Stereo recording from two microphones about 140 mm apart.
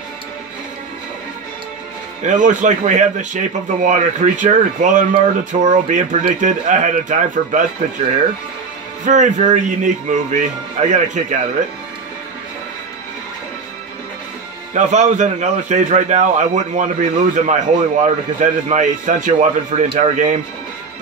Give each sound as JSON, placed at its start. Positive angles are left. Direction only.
{"t": 2.2, "sound": "speech", "side_deg": -60}
{"t": 9.0, "sound": "speech", "side_deg": -60}
{"t": 14.7, "sound": "speech", "side_deg": -60}